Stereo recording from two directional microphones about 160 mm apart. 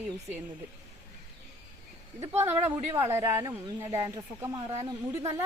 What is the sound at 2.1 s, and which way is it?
Speech, 15° right (ahead or behind).